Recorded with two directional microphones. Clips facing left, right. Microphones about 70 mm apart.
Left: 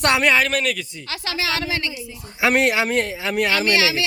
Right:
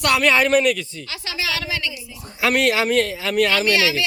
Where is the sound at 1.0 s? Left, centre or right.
Left.